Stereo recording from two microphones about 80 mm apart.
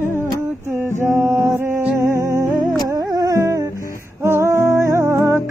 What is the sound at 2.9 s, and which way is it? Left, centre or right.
Music, right.